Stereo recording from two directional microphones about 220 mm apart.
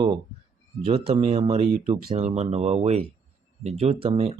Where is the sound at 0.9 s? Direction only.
25° right (ahead or behind).